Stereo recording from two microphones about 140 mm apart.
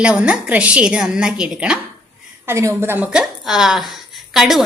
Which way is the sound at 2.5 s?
20° right (ahead or behind).